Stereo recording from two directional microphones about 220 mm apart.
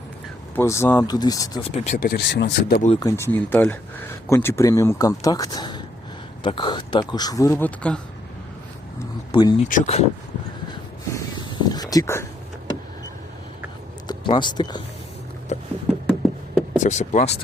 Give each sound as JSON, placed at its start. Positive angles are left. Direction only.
{"t": 0.5, "sound": "speech", "side_deg": 10}
{"t": 1.7, "sound": "speech", "side_deg": 30}
{"t": 2.9, "sound": "speech", "side_deg": 15}
{"t": 9.3, "sound": "speech", "side_deg": 20}
{"t": 9.6, "sound": "speech", "side_deg": 35}
{"t": 11.6, "sound": "a sound", "side_deg": 15}
{"t": 14.1, "sound": "speech", "side_deg": 20}
{"t": 15.5, "sound": "a sound", "side_deg": 35}
{"t": 16.7, "sound": "speech", "side_deg": 35}